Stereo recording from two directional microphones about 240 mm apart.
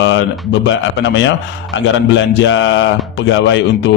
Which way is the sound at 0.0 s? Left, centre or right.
Left.